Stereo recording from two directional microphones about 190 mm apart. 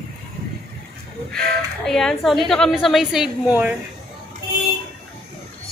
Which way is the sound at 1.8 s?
Centre (ahead or behind).